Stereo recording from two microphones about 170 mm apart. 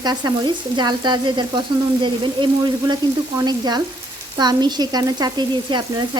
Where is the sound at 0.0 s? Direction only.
25° right (ahead or behind).